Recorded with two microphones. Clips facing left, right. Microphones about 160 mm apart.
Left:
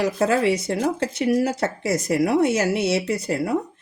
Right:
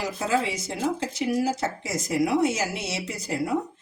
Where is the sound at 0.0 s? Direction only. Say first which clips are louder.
Left 6 dB; 65° left (ahead or behind).